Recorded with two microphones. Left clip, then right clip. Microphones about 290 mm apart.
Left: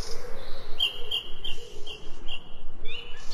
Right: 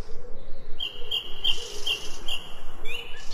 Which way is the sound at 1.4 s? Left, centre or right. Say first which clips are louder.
Right 11 dB; centre.